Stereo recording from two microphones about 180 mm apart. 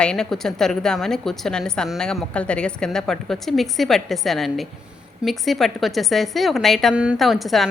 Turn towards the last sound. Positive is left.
turn(degrees=0)  # may be behind; listen again after turning